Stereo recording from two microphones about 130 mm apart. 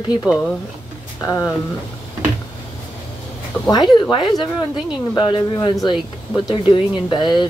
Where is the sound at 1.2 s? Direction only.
25° left (ahead or behind).